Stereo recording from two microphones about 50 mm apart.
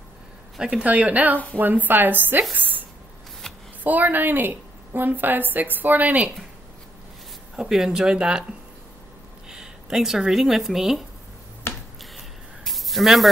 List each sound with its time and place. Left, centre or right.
0.6 s speech: centre
0.8 s a woman's voice: right
7.5 s speech: centre
9.5 s speech: centre
11.7 s finger snapping: left
12.6 s spray: centre